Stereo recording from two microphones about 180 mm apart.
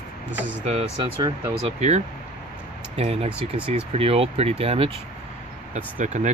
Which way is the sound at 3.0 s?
35° right (ahead or behind).